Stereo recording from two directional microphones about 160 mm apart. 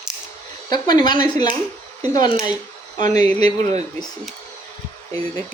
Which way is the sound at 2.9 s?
50° right (ahead or behind).